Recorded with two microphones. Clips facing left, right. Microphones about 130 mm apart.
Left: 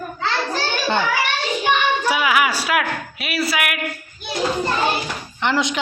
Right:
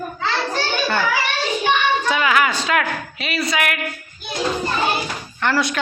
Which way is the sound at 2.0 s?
10° left (ahead or behind).